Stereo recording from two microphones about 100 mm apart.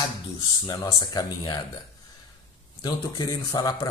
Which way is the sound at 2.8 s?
40° left (ahead or behind).